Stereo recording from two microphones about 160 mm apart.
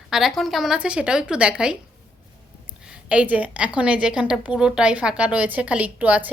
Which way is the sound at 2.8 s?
5° right (ahead or behind).